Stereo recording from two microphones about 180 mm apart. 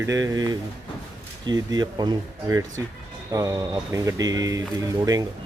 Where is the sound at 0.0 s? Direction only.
20° right (ahead or behind).